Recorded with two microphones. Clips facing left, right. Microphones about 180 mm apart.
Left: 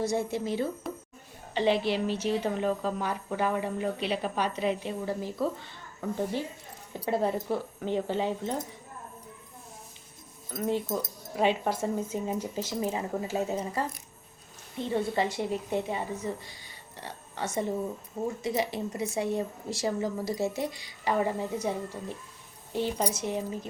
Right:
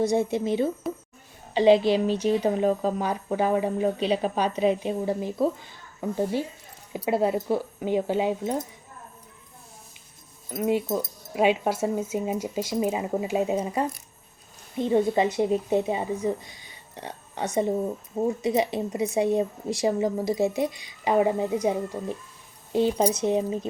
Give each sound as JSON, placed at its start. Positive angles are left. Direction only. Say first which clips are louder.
{"t": 0.0, "sound": "a woman's voice", "louder": "right 6 dB", "side_deg": -20}
{"t": 10.5, "sound": "a woman's voice", "louder": "right 5 dB", "side_deg": -10}
{"t": 23.0, "sound": "a woman's voice", "louder": "right 7 dB", "side_deg": -25}